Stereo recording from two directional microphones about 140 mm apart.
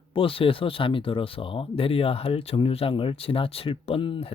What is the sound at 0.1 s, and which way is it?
Speech, 40° left (ahead or behind).